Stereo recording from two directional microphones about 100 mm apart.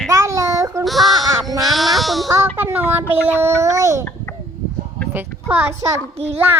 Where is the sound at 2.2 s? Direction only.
30° right (ahead or behind).